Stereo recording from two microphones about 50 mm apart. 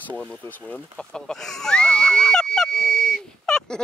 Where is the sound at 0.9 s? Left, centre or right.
Centre.